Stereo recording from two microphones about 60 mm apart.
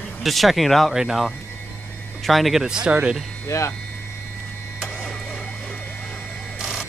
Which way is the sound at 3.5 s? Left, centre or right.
Left.